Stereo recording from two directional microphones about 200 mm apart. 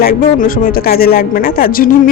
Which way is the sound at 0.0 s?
45° left (ahead or behind).